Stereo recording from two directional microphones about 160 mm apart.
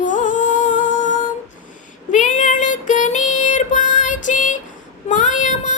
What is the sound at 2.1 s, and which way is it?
Child singing, 50° left (ahead or behind).